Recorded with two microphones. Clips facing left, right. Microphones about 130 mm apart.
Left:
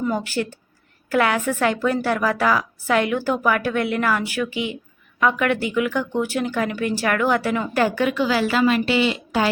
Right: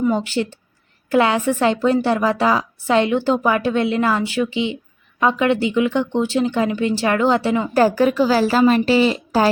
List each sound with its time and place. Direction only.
0.1 s a woman's voice: 20° right (ahead or behind)
7.7 s a woman's voice: 40° right (ahead or behind)